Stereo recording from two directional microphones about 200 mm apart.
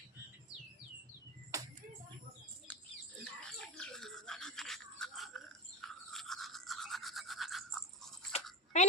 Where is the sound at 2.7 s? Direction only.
5° left (ahead or behind).